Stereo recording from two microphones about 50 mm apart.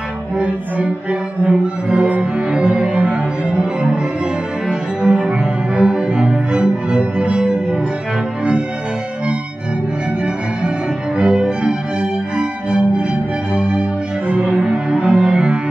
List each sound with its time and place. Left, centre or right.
1.4 s music: right
5.0 s music: centre
11.1 s music: centre